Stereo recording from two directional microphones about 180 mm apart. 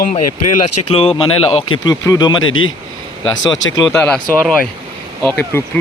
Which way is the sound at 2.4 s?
90° left.